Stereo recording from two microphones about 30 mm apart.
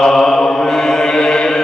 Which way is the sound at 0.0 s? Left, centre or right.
Centre.